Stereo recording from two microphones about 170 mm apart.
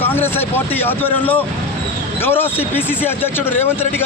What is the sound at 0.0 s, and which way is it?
A man's voice, 10° left (ahead or behind).